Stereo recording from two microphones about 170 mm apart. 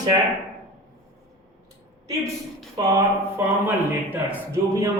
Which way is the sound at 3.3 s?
10° right (ahead or behind).